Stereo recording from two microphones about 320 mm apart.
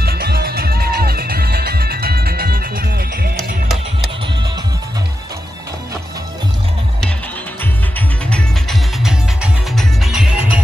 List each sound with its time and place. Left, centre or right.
0.0 s music: right
8.3 s music: centre